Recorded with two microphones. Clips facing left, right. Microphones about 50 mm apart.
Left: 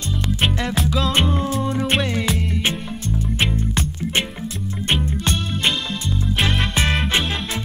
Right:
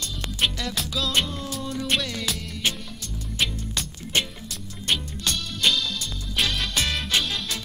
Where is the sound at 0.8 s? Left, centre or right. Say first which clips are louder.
Left 5 dB; left.